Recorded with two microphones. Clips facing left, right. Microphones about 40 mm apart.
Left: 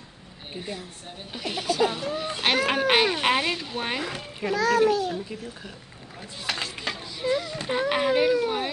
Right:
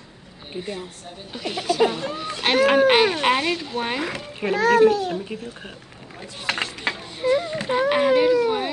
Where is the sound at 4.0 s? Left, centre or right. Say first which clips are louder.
Right 4 dB; right.